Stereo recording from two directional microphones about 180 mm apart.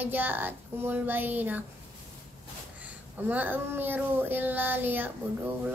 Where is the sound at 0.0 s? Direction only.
10° right (ahead or behind).